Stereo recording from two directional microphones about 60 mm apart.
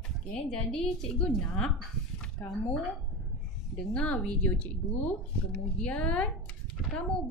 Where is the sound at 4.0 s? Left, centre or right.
Centre.